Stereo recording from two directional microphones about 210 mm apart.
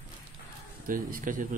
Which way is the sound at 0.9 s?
40° right (ahead or behind).